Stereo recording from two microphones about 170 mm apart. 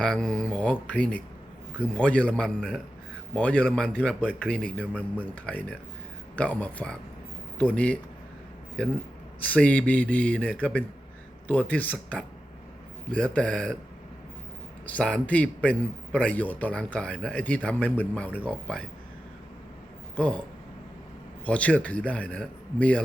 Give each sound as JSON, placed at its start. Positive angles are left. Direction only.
{"t": 0.0, "sound": "a man's voice", "side_deg": 5}
{"t": 9.5, "sound": "a man's voice", "side_deg": 10}
{"t": 14.8, "sound": "a man's voice", "side_deg": 5}
{"t": 20.1, "sound": "a man's voice", "side_deg": 10}
{"t": 21.4, "sound": "a man's voice", "side_deg": 10}